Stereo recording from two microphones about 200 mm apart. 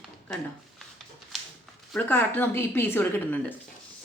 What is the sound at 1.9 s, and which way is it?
A woman's voice, 10° left (ahead or behind).